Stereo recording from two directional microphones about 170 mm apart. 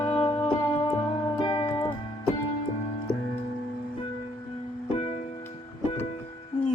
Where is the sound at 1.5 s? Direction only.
30° left (ahead or behind).